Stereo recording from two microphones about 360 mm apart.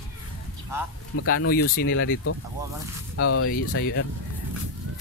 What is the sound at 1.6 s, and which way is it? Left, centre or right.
Speech, left.